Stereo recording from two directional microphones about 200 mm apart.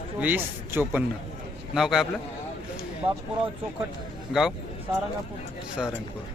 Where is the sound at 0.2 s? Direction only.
10° right (ahead or behind).